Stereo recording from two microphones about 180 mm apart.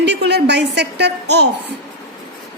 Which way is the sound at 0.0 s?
70° right (ahead or behind).